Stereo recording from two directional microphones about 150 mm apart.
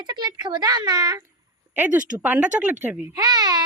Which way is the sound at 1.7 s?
10° right (ahead or behind).